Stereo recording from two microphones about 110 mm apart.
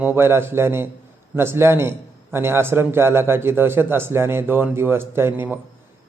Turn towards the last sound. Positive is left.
turn(degrees=-20)  # may be behind; listen again after turning